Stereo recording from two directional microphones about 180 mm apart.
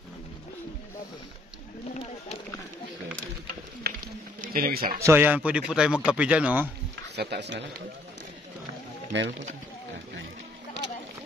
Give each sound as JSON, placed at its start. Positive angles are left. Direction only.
{"t": 3.9, "sound": "a sound", "side_deg": -60}
{"t": 4.4, "sound": "speech", "side_deg": -55}
{"t": 5.0, "sound": "speech", "side_deg": -10}
{"t": 7.2, "sound": "speech", "side_deg": -70}
{"t": 9.1, "sound": "speech", "side_deg": -85}